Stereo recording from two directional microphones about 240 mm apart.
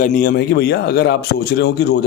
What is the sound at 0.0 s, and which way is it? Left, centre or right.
Speech, left.